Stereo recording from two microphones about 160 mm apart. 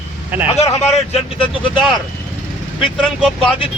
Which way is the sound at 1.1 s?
35° left (ahead or behind).